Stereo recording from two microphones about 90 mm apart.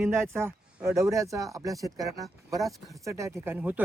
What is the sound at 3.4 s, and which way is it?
Speech, 20° right (ahead or behind).